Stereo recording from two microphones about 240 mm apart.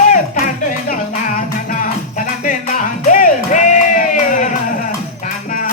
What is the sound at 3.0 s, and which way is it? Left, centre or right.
Music, left.